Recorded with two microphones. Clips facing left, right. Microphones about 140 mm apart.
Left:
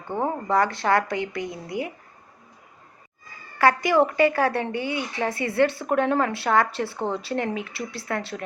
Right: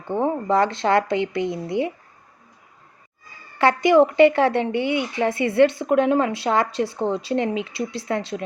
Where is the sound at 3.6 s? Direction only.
20° right (ahead or behind).